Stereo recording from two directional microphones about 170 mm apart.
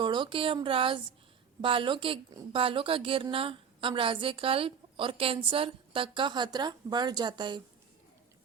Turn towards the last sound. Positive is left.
turn(degrees=-25)  # may be behind; listen again after turning